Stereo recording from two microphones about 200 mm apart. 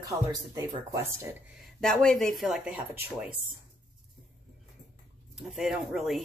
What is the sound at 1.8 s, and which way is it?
Speech, 5° left (ahead or behind).